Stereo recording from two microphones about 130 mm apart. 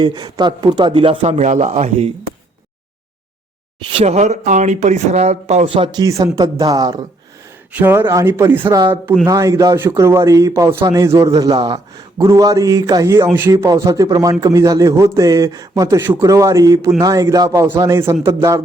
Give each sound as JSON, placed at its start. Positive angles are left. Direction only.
{"t": 0.0, "sound": "speech", "side_deg": -35}
{"t": 0.9, "sound": "speech", "side_deg": -45}
{"t": 4.0, "sound": "speech", "side_deg": -60}
{"t": 5.6, "sound": "speech", "side_deg": -40}
{"t": 6.0, "sound": "speech", "side_deg": -25}
{"t": 7.7, "sound": "speech", "side_deg": -15}